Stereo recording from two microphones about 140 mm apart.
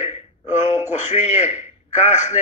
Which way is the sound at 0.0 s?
55° left (ahead or behind).